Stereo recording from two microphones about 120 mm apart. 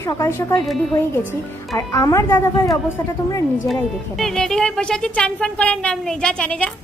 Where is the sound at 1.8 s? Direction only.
25° left (ahead or behind).